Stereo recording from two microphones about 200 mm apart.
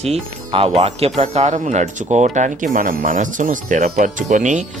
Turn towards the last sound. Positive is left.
turn(degrees=-40)  # may be behind; listen again after turning